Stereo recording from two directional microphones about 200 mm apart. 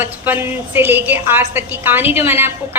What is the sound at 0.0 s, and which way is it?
A woman's voice, 10° right (ahead or behind).